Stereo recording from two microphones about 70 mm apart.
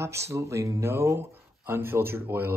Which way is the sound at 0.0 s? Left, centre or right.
Right.